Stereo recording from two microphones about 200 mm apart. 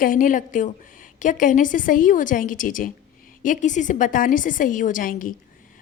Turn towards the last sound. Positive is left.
turn(degrees=45)  # may be behind; listen again after turning